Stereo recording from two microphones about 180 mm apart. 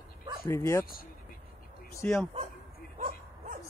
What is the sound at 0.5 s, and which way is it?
Speech, 15° left (ahead or behind).